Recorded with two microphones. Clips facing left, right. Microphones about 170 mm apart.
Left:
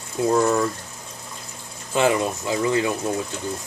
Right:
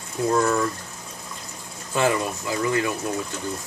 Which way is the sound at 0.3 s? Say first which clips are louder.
Left 2 dB; 20° left (ahead or behind).